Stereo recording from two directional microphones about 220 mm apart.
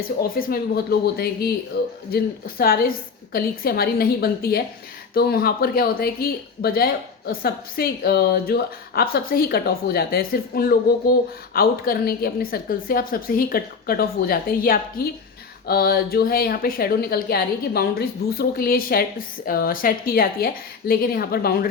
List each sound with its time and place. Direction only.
0.2 s a woman's voice: 45° left (ahead or behind)